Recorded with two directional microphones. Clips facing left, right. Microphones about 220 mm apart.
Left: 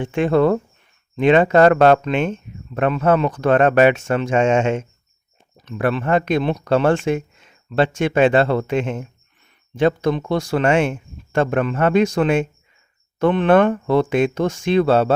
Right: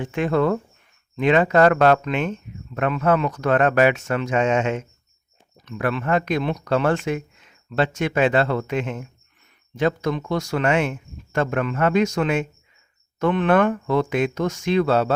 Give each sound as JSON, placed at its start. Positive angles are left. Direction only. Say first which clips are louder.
{"t": 0.0, "sound": "speech", "louder": "left 4 dB", "side_deg": 30}